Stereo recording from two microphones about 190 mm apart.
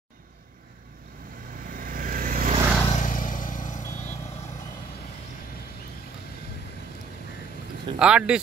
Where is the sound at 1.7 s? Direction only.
45° right (ahead or behind).